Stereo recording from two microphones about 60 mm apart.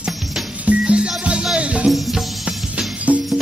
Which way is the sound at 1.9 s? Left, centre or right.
Centre.